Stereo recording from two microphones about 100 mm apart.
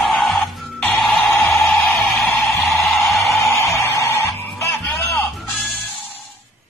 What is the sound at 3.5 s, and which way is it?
Music, 30° left (ahead or behind).